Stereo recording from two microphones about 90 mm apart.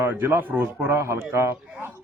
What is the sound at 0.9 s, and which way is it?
Speech, 35° right (ahead or behind).